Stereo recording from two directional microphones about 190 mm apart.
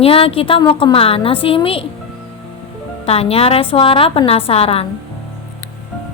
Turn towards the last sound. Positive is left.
turn(degrees=30)  # may be behind; listen again after turning